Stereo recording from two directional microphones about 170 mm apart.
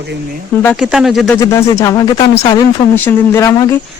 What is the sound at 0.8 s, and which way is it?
Speech, centre (ahead or behind).